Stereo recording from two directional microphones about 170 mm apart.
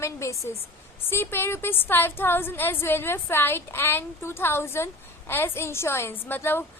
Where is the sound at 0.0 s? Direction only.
15° left (ahead or behind).